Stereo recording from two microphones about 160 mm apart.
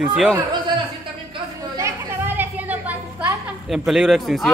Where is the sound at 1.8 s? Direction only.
15° right (ahead or behind).